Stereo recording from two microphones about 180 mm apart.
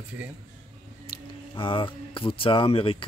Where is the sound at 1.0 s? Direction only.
30° left (ahead or behind).